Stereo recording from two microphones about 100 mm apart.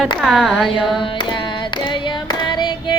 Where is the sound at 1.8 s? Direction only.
50° left (ahead or behind).